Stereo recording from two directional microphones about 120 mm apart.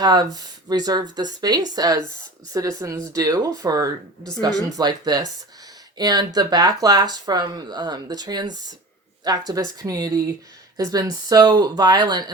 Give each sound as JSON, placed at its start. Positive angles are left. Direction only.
{"t": 0.0, "sound": "speech", "side_deg": -35}